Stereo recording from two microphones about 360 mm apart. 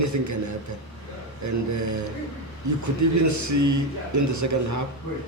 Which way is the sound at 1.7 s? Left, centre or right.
Right.